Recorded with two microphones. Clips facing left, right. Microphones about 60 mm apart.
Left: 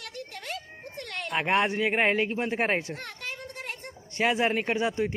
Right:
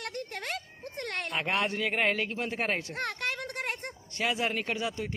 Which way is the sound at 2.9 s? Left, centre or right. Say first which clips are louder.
Right 4 dB; right.